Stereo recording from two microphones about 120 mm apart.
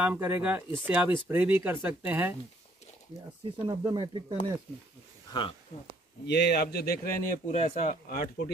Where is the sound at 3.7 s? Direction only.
40° right (ahead or behind).